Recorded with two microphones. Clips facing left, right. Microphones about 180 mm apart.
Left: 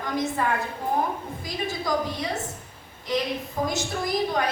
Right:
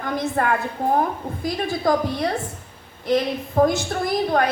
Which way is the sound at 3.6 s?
60° right (ahead or behind).